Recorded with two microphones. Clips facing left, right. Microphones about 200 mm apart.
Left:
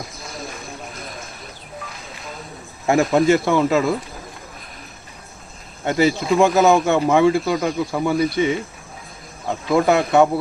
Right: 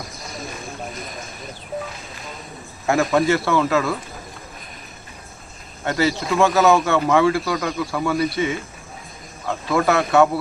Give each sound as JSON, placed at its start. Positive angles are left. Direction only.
{"t": 2.8, "sound": "speech", "side_deg": 20}
{"t": 5.8, "sound": "speech", "side_deg": 15}
{"t": 9.6, "sound": "speech", "side_deg": 20}